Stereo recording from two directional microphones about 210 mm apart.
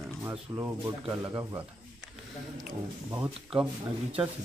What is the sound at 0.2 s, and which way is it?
Speech, 10° right (ahead or behind).